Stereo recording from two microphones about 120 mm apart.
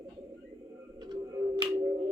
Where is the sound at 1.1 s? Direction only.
40° right (ahead or behind).